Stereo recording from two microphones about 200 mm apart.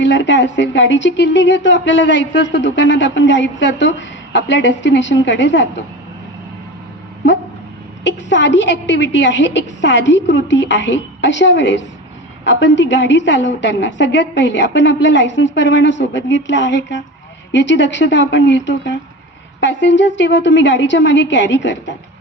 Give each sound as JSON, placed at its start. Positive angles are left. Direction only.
{"t": 0.0, "sound": "a woman's voice", "side_deg": 65}
{"t": 8.0, "sound": "a woman's voice", "side_deg": 60}